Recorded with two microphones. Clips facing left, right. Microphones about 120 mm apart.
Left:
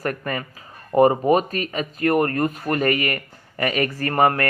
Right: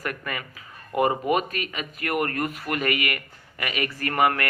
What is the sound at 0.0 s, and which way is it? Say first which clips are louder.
Speech: left 6 dB; 40° left (ahead or behind).